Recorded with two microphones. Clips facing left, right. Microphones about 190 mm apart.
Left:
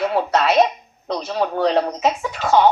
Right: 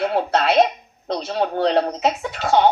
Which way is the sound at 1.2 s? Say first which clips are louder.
Even; 50° right (ahead or behind).